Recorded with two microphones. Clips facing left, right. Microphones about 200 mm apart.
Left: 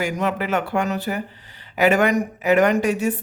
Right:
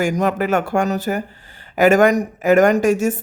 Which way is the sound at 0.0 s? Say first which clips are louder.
Right 5 dB; 45° right (ahead or behind).